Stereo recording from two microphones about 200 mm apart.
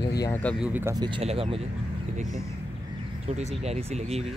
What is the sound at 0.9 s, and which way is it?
Speech, 25° right (ahead or behind).